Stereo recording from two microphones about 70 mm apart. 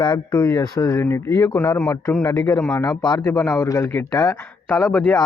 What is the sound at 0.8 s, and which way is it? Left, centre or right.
Speech, left.